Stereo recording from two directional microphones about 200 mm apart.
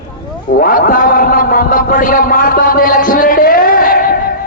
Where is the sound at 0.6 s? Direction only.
45° left (ahead or behind).